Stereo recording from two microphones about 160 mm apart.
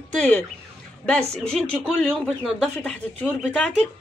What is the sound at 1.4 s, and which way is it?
Speech, 5° left (ahead or behind).